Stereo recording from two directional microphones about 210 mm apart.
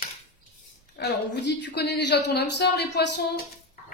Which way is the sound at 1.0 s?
50° left (ahead or behind).